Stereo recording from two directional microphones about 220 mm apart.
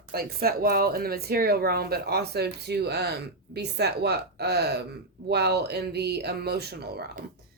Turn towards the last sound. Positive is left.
turn(degrees=-45)  # may be behind; listen again after turning